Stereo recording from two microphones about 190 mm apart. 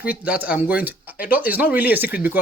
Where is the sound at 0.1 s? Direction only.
5° right (ahead or behind).